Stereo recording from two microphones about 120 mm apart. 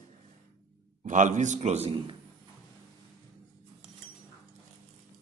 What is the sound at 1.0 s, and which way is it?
Speech, 90° right.